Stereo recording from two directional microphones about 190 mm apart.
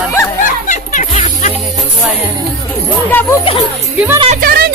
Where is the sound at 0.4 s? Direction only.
40° left (ahead or behind).